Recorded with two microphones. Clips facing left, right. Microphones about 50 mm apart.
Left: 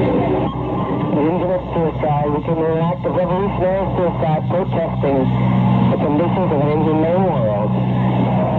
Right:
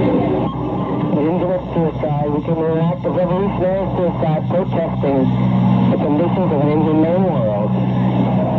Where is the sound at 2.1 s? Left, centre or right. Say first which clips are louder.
Left 2 dB; left.